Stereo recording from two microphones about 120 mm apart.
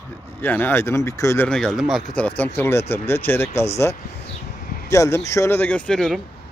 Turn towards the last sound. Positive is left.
turn(degrees=5)  # may be behind; listen again after turning